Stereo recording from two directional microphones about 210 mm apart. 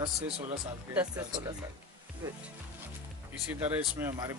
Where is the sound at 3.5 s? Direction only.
10° right (ahead or behind).